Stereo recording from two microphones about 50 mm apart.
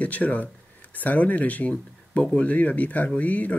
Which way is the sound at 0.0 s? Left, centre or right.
Left.